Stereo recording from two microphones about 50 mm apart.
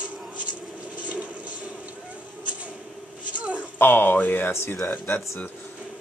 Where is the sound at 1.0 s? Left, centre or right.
Right.